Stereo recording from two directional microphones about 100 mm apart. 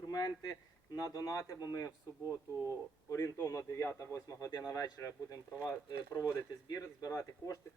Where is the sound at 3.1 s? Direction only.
35° left (ahead or behind).